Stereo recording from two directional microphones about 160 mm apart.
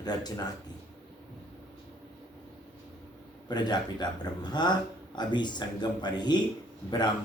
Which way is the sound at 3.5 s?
25° left (ahead or behind).